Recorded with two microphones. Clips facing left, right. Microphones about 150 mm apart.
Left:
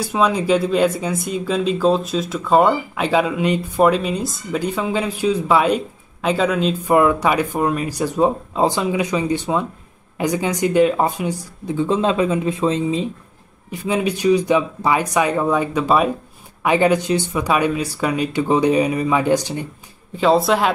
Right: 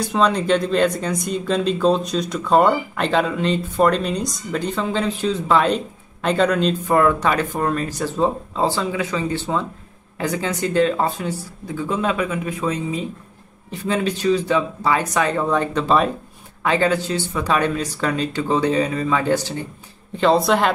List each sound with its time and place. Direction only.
0.0 s speech: 5° left (ahead or behind); by 13.1 s 25° left (ahead or behind)
13.7 s speech: 10° left (ahead or behind)
20.2 s speech: centre (ahead or behind)